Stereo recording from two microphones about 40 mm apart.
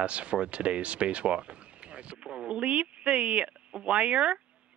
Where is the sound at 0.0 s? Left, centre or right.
Right.